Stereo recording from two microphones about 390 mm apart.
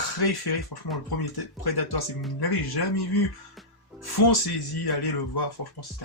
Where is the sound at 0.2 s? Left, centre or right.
Left.